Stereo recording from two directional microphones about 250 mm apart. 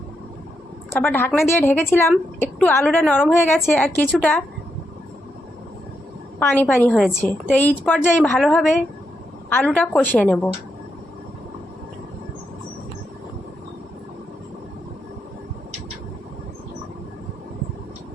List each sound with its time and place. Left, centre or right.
0.9 s a woman's voice: centre
6.4 s a woman's voice: centre